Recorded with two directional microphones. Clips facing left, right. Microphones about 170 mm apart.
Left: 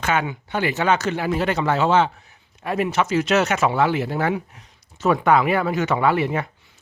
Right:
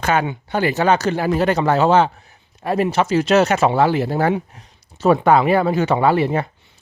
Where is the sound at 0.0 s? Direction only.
35° right (ahead or behind).